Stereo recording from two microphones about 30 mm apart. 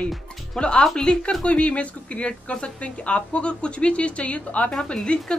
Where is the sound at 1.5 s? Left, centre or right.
Left.